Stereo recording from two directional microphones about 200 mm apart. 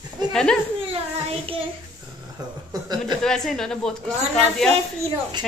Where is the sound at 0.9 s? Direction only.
25° right (ahead or behind).